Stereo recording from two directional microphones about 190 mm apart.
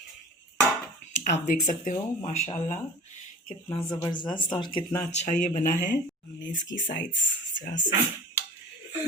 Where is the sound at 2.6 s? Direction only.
35° left (ahead or behind).